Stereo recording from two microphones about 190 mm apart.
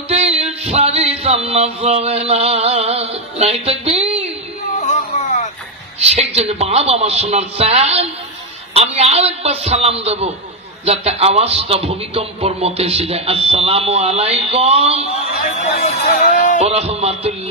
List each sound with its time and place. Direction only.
0.1 s music: 30° right (ahead or behind)
4.7 s music: 40° left (ahead or behind)
5.9 s a man's voice: 35° right (ahead or behind)
15.6 s speech: 35° left (ahead or behind)
16.3 s music: 45° left (ahead or behind)
16.5 s a man's voice: 35° right (ahead or behind)